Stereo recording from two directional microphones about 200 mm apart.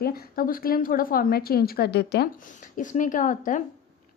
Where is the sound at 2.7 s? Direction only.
40° left (ahead or behind).